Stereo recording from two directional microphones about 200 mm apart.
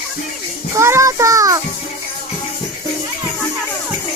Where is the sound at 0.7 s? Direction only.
15° right (ahead or behind).